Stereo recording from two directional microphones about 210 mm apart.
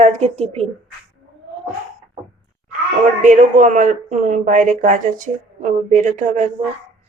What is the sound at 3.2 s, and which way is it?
Speech, 35° right (ahead or behind).